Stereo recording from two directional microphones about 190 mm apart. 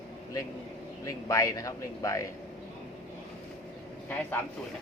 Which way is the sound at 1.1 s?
15° left (ahead or behind).